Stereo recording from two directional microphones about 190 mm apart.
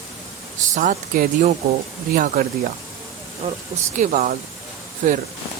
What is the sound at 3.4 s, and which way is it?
Speech, 30° right (ahead or behind).